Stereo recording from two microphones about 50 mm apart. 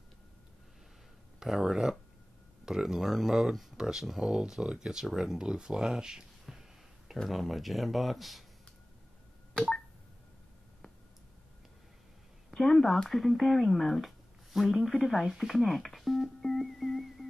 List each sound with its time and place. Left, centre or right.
1.4 s speech: centre
6.5 s a sound: centre
7.2 s speech: centre
9.5 s telephone dialing: centre
12.4 s a sound: centre
13.1 s speech: centre